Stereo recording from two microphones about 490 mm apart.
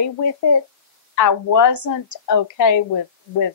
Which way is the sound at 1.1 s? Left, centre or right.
Left.